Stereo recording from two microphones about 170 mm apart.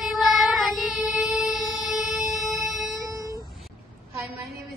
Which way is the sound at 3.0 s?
20° right (ahead or behind).